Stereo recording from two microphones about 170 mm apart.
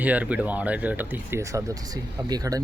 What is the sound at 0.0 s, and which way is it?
Speech, 10° right (ahead or behind).